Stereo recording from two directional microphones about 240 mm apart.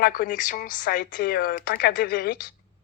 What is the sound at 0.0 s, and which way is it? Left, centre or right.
Speech, left.